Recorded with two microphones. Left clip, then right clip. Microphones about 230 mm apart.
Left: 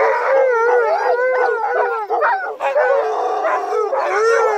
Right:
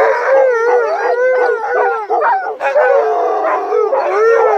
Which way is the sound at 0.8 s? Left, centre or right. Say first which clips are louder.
Right 2 dB; left.